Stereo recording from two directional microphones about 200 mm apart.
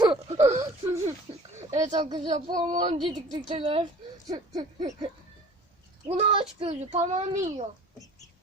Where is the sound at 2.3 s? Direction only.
40° right (ahead or behind).